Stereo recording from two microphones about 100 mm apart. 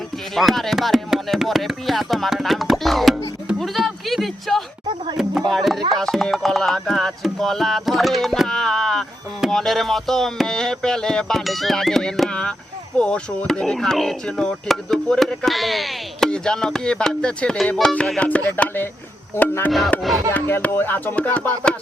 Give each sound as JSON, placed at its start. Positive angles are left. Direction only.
{"t": 0.3, "sound": "music", "side_deg": 0}
{"t": 3.6, "sound": "a sound", "side_deg": 0}
{"t": 5.1, "sound": "speech", "side_deg": 0}
{"t": 5.9, "sound": "music", "side_deg": 5}
{"t": 20.0, "sound": "music", "side_deg": 0}
{"t": 20.3, "sound": "music", "side_deg": 20}